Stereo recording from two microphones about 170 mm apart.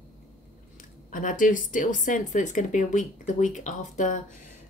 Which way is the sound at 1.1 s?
50° left (ahead or behind).